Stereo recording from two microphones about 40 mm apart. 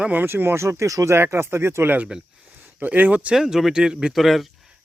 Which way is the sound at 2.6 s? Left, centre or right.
Right.